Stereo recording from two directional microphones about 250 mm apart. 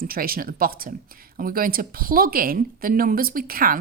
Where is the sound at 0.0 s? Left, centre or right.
Right.